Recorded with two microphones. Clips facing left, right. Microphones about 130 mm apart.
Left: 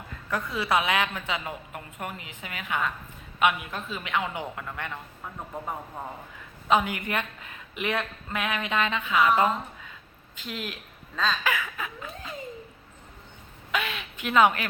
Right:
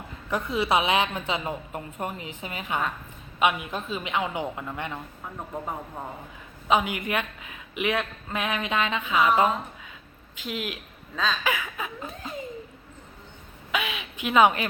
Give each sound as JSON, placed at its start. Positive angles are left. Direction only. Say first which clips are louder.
{"t": 0.3, "sound": "a woman's voice", "louder": "right 2 dB", "side_deg": -20}
{"t": 6.7, "sound": "speech", "louder": "even", "side_deg": -15}
{"t": 8.3, "sound": "a woman's voice", "louder": "right 1 dB", "side_deg": -25}
{"t": 13.7, "sound": "speech", "louder": "right 1 dB", "side_deg": -15}